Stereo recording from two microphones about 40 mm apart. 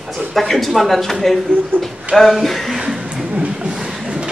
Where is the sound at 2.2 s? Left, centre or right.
Centre.